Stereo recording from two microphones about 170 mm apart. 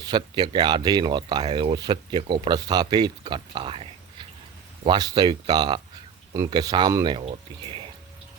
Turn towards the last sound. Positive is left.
turn(degrees=-30)  # may be behind; listen again after turning